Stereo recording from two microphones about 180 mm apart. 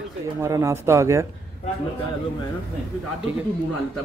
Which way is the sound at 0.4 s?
20° right (ahead or behind).